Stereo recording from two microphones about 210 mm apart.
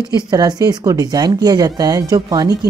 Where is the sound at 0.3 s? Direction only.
20° right (ahead or behind).